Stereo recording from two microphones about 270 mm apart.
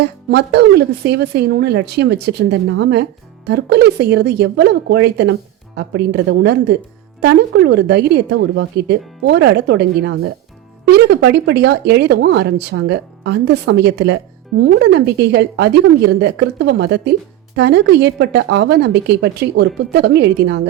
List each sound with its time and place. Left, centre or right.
0.3 s speech: right